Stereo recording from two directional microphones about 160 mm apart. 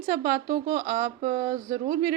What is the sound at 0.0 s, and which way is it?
Speech, 55° right (ahead or behind).